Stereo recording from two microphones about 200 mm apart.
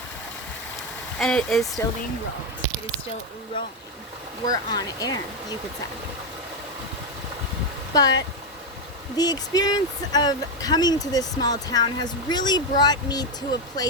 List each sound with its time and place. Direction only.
1.2 s speech: centre (ahead or behind)
4.4 s speech: 20° left (ahead or behind)
9.1 s speech: 20° left (ahead or behind)